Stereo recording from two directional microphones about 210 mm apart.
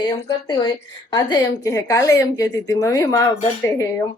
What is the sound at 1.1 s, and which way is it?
A woman's voice, 15° left (ahead or behind).